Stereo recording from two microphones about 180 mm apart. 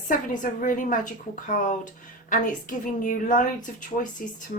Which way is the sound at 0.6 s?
50° left (ahead or behind).